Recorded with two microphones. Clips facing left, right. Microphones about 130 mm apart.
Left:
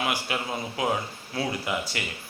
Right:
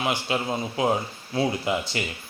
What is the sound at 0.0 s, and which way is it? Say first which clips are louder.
A man's voice: right 3 dB; 25° right (ahead or behind).